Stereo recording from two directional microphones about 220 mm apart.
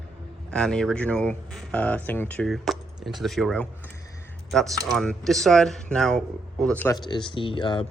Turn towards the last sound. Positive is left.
turn(degrees=20)  # may be behind; listen again after turning